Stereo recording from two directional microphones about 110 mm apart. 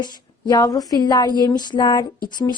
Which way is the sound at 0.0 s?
35° left (ahead or behind).